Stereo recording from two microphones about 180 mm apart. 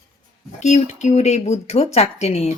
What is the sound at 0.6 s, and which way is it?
Speech, 40° left (ahead or behind).